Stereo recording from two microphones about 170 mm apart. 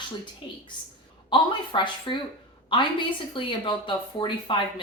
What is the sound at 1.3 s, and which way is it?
A woman's voice, 30° left (ahead or behind).